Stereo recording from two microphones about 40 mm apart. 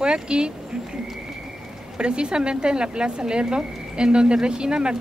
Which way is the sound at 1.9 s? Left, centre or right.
Right.